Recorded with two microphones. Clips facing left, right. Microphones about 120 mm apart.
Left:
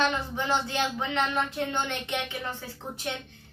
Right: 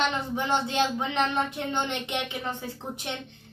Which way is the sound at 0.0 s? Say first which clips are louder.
Even; 15° right (ahead or behind).